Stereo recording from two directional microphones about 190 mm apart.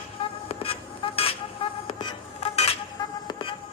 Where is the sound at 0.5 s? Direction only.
30° left (ahead or behind).